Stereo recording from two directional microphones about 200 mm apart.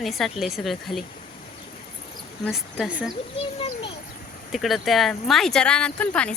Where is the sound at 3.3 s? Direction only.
30° left (ahead or behind).